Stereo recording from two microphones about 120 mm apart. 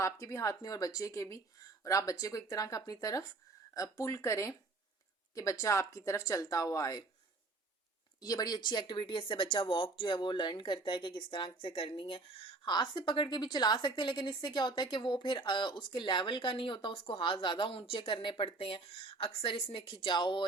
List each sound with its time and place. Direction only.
0.0 s speech: 25° left (ahead or behind)
8.2 s speech: 30° left (ahead or behind)